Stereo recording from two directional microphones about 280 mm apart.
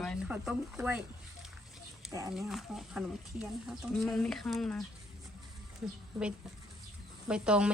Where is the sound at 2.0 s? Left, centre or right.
Centre.